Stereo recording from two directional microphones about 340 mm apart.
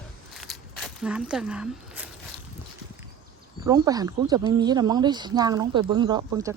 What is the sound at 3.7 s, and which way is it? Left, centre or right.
Speech, centre.